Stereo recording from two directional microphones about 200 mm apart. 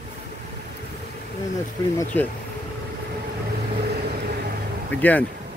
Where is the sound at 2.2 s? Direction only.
10° left (ahead or behind).